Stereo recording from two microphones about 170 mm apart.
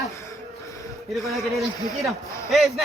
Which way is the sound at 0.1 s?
20° left (ahead or behind).